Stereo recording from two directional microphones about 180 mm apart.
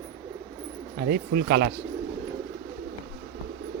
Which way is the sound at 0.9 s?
55° right (ahead or behind).